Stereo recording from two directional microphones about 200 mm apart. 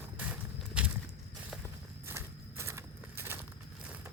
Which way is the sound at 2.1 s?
15° right (ahead or behind).